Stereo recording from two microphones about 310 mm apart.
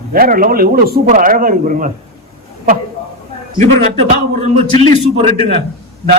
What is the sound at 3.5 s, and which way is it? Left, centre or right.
Speech, right.